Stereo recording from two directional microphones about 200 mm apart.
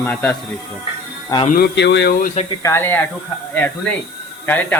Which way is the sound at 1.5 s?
55° left (ahead or behind).